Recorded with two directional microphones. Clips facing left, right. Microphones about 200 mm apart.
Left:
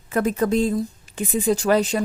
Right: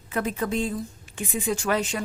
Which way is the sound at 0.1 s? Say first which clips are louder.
Left 7 dB; 45° left (ahead or behind).